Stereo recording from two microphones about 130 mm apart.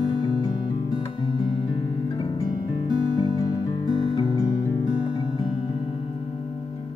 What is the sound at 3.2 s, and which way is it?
Music, 30° left (ahead or behind).